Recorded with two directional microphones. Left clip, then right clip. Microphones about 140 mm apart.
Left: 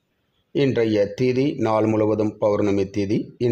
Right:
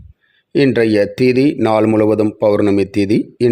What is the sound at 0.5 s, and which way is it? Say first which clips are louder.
A man's voice: right 7 dB; 40° right (ahead or behind).